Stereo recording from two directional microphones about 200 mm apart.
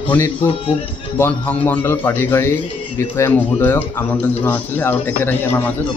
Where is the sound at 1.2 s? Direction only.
10° left (ahead or behind).